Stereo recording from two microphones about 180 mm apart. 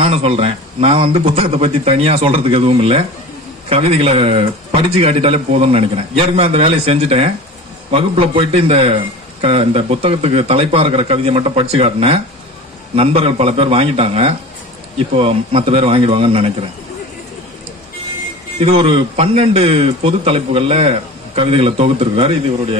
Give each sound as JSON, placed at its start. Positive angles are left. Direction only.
{"t": 0.0, "sound": "a man's voice", "side_deg": -35}
{"t": 18.6, "sound": "a man's voice", "side_deg": -30}